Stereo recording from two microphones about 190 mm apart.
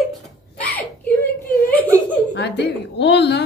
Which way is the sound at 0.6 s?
10° left (ahead or behind).